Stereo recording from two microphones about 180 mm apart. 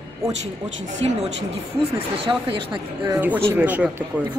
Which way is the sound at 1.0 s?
30° right (ahead or behind).